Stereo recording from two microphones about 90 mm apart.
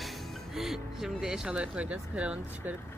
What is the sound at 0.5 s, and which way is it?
Speech, centre (ahead or behind).